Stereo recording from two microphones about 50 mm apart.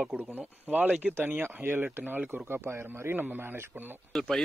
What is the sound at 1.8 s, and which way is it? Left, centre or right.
Speech, right.